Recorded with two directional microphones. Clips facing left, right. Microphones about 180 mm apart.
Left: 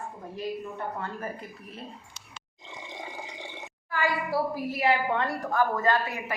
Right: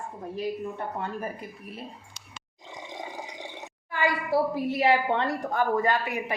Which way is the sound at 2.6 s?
15° right (ahead or behind).